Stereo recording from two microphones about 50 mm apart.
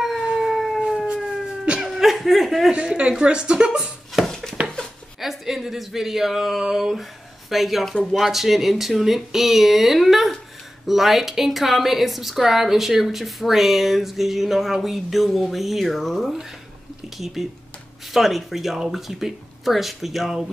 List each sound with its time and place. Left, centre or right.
0.0 s siren: centre
1.0 s siren: centre
1.9 s chuckle: centre
2.7 s speech: centre
5.2 s speech: centre